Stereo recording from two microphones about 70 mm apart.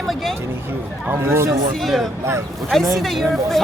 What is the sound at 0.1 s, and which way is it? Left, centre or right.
Speech, centre.